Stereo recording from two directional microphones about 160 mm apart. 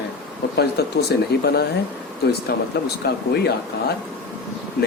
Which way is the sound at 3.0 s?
90° left.